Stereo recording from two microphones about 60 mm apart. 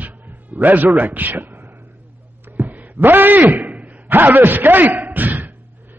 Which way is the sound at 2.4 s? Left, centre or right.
Right.